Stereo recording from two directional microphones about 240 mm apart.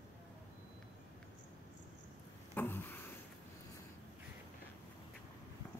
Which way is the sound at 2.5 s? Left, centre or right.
Centre.